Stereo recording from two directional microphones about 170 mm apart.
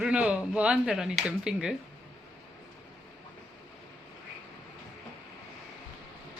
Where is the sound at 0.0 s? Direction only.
5° right (ahead or behind).